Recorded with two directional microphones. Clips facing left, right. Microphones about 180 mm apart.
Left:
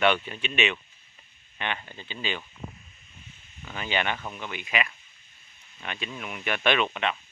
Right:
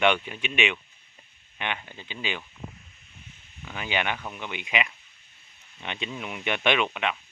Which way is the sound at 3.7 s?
10° right (ahead or behind).